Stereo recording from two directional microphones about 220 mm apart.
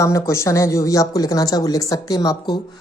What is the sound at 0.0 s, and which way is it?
Speech, 15° left (ahead or behind).